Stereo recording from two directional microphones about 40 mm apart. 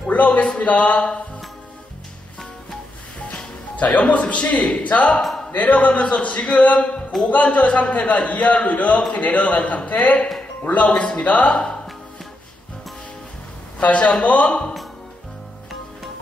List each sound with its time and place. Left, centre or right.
0.1 s a man's voice: left
3.3 s a man's voice: left
10.9 s a man's voice: left
11.5 s speech: left
13.7 s a man's voice: left